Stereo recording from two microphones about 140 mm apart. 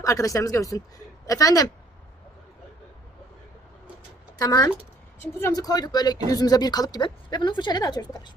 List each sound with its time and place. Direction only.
0.0 s speech: 25° left (ahead or behind)
4.4 s speech: 25° left (ahead or behind)